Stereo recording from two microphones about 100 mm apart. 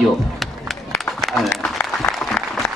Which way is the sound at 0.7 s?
Centre (ahead or behind).